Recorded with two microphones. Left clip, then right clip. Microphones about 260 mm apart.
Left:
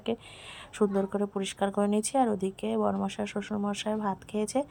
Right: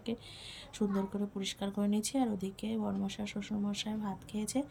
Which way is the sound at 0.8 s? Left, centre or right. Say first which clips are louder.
Left 9 dB; left.